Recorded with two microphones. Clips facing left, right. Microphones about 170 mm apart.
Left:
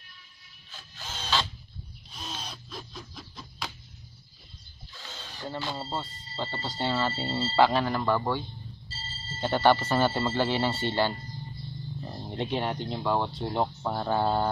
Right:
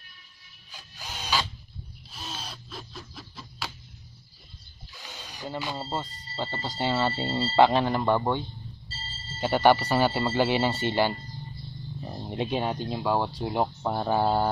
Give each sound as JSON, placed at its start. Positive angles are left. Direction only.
{"t": 0.7, "sound": "printer", "side_deg": -15}
{"t": 4.9, "sound": "speech", "side_deg": -15}
{"t": 9.4, "sound": "speech", "side_deg": -15}
{"t": 12.0, "sound": "a sound", "side_deg": -15}
{"t": 12.8, "sound": "speech", "side_deg": -10}